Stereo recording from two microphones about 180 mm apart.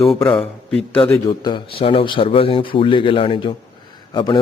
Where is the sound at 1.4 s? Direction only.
30° left (ahead or behind).